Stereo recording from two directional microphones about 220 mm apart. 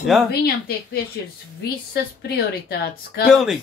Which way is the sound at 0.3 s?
45° left (ahead or behind).